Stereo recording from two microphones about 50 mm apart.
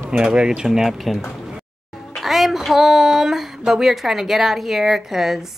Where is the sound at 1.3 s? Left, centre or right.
Centre.